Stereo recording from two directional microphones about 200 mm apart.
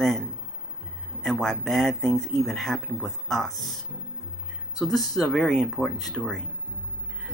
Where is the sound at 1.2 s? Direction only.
Centre (ahead or behind).